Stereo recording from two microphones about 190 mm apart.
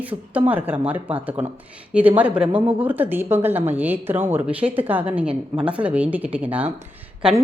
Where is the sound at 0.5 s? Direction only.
10° right (ahead or behind).